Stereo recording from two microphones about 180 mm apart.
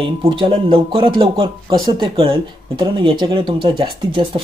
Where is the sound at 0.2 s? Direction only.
30° right (ahead or behind).